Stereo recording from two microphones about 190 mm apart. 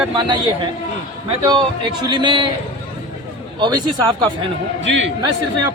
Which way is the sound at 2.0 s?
25° right (ahead or behind).